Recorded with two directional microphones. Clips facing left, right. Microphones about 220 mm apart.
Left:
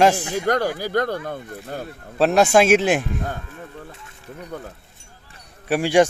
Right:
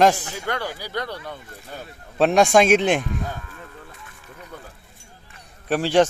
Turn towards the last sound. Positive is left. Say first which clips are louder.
# left 1 dB
turn(degrees=10)  # may be behind; listen again after turning